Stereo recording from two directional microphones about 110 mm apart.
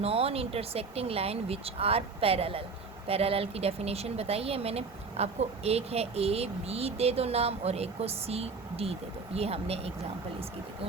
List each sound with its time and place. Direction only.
0.0 s speech: 60° right (ahead or behind)